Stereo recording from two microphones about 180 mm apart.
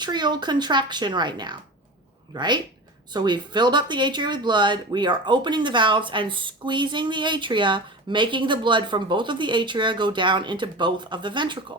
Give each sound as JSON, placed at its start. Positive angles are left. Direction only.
{"t": 0.0, "sound": "speech", "side_deg": -25}